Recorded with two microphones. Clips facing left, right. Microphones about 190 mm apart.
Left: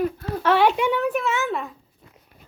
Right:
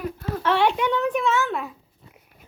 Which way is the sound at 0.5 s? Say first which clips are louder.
Left 2 dB; 5° left (ahead or behind).